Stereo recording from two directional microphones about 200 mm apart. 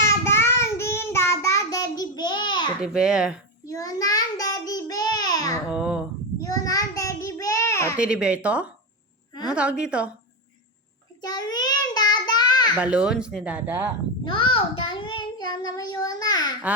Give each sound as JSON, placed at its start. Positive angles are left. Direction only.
{"t": 0.1, "sound": "child singing", "side_deg": 15}
{"t": 2.8, "sound": "speech", "side_deg": -5}
{"t": 3.7, "sound": "child singing", "side_deg": 15}
{"t": 5.6, "sound": "babbling", "side_deg": -5}
{"t": 6.4, "sound": "child singing", "side_deg": 15}
{"t": 7.9, "sound": "speech", "side_deg": -5}
{"t": 11.2, "sound": "child singing", "side_deg": 20}
{"t": 12.8, "sound": "speech", "side_deg": -5}
{"t": 14.3, "sound": "child singing", "side_deg": 25}